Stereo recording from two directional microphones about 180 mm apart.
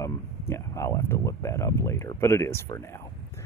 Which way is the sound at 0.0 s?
15° left (ahead or behind).